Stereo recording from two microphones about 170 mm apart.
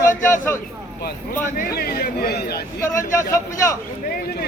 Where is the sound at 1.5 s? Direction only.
60° left (ahead or behind).